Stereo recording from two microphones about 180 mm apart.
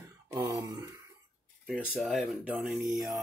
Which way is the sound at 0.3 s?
20° right (ahead or behind).